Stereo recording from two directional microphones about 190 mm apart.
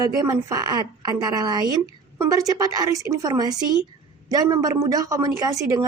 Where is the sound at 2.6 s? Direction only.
20° right (ahead or behind).